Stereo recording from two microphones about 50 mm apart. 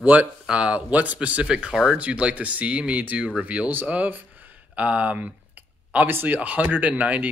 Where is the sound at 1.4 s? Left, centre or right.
Centre.